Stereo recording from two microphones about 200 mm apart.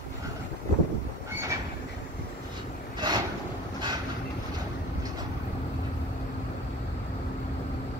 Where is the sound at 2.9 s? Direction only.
20° right (ahead or behind).